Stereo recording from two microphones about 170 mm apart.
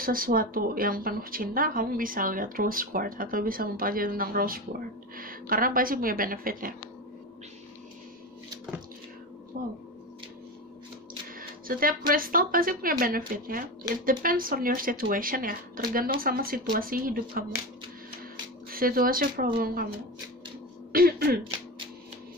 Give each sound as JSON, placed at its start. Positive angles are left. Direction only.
{"t": 0.0, "sound": "speech", "side_deg": -55}
{"t": 9.5, "sound": "speech", "side_deg": -55}
{"t": 11.3, "sound": "speech", "side_deg": -55}
{"t": 18.7, "sound": "speech", "side_deg": -60}
{"t": 20.9, "sound": "speech", "side_deg": -60}